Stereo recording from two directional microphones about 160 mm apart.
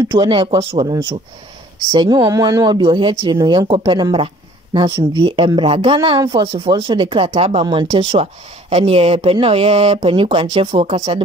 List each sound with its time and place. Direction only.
0.0 s a sound: 20° right (ahead or behind)
0.3 s speech: 30° right (ahead or behind)
7.6 s speech: 30° right (ahead or behind)